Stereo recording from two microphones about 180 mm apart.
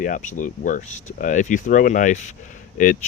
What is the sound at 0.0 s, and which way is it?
Speech, 45° left (ahead or behind).